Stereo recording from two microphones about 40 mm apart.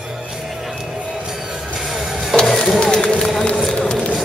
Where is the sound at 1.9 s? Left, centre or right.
Centre.